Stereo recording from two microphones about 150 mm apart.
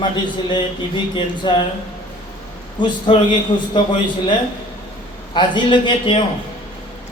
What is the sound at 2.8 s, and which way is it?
Speech, 35° left (ahead or behind).